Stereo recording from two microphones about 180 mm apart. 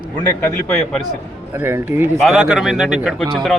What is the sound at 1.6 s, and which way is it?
Speech, 15° right (ahead or behind).